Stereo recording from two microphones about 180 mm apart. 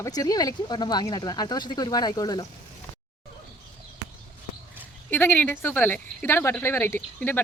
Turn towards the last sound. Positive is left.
turn(degrees=10)  # may be behind; listen again after turning